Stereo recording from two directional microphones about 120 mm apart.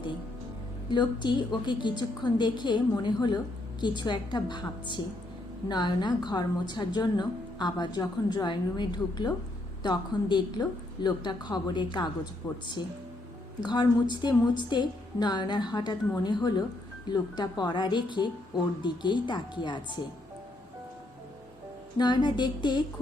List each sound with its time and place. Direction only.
0.9 s a woman's voice: 40° left (ahead or behind)
21.9 s a woman's voice: 35° left (ahead or behind)